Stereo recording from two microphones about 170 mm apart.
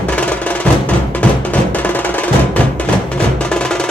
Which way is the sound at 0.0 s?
10° left (ahead or behind).